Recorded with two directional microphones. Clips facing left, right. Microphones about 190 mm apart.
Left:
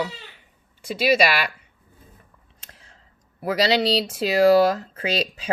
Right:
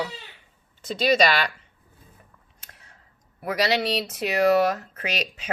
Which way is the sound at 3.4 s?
30° left (ahead or behind).